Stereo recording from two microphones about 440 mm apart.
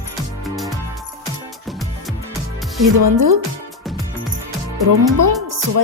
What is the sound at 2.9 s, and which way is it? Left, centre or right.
Speech, right.